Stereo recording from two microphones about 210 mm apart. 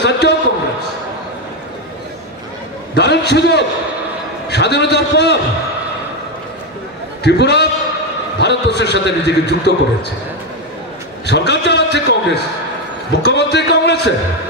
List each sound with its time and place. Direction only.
0.0 s a sound: 55° left (ahead or behind)
2.9 s a sound: 55° left (ahead or behind)
4.5 s a man's voice: 55° left (ahead or behind)
7.2 s a man's voice: 55° left (ahead or behind)
11.2 s a man's voice: 55° left (ahead or behind)
13.2 s a man's voice: 55° left (ahead or behind)